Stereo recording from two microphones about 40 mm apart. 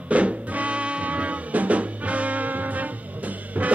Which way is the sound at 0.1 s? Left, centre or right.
Right.